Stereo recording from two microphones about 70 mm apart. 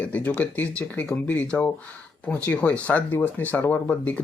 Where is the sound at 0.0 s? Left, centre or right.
Left.